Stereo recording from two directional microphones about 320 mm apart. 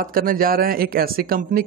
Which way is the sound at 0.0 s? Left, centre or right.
Right.